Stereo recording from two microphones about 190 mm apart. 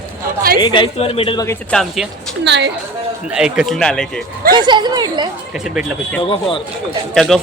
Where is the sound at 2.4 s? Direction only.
65° right (ahead or behind).